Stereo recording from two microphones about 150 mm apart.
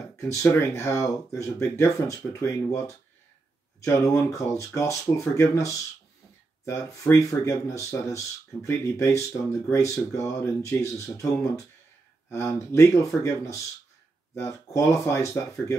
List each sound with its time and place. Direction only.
0.2 s speech: 20° left (ahead or behind)